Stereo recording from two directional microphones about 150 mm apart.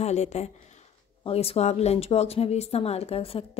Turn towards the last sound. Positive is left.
turn(degrees=40)  # may be behind; listen again after turning